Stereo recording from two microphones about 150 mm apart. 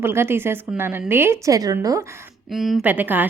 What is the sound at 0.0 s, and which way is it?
A woman's voice, 15° right (ahead or behind).